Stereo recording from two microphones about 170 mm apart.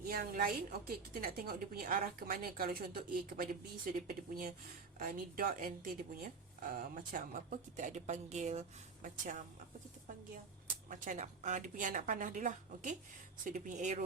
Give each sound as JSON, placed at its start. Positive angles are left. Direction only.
{"t": 0.1, "sound": "a woman's voice", "side_deg": -60}
{"t": 10.8, "sound": "speech", "side_deg": -50}